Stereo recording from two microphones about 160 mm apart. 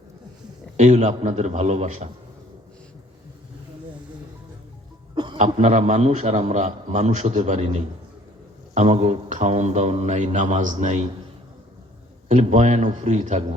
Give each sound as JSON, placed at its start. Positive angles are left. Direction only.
{"t": 0.8, "sound": "a man's voice", "side_deg": -45}
{"t": 5.1, "sound": "music", "side_deg": -30}
{"t": 5.4, "sound": "a man's voice", "side_deg": -45}
{"t": 12.3, "sound": "a man's voice", "side_deg": -50}